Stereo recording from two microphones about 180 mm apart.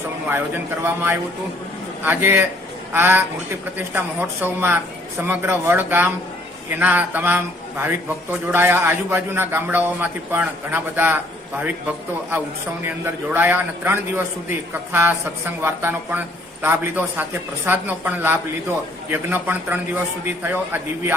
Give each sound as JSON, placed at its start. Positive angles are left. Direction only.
{"t": 0.3, "sound": "a man's voice", "side_deg": -10}
{"t": 13.3, "sound": "a man's voice", "side_deg": -10}